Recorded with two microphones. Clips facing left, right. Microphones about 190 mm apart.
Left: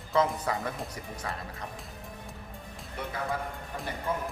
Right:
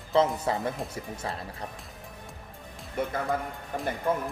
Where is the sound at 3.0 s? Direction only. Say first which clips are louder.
Right 5 dB; 50° right (ahead or behind).